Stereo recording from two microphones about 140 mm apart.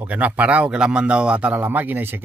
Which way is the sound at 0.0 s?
10° right (ahead or behind).